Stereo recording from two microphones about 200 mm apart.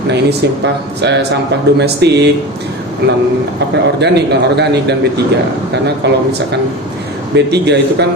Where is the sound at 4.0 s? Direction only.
60° right (ahead or behind).